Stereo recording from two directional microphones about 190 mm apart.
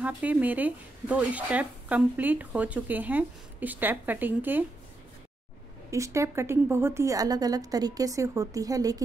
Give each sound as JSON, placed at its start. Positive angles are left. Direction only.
{"t": 0.0, "sound": "speech", "side_deg": -10}
{"t": 5.9, "sound": "speech", "side_deg": -15}